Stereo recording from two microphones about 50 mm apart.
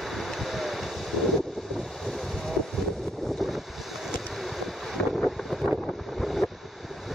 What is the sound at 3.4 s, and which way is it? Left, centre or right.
Wind, centre.